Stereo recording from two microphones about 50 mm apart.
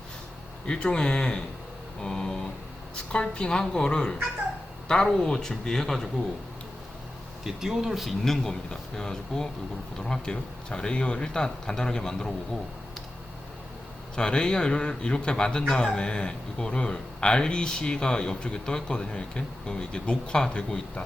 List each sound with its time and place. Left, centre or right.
0.7 s speech: centre
7.4 s speech: centre
8.2 s speech: centre
14.2 s speech: centre